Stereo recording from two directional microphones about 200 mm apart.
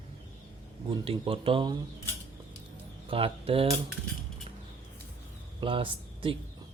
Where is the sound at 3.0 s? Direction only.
25° right (ahead or behind).